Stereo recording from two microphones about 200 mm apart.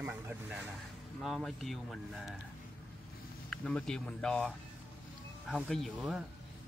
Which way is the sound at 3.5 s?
5° left (ahead or behind).